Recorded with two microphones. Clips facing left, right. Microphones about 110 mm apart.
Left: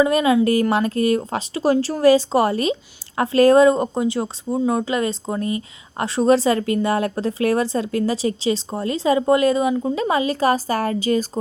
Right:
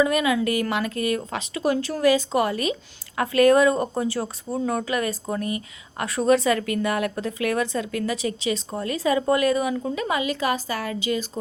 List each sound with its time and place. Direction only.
0.0 s a woman's voice: 30° left (ahead or behind)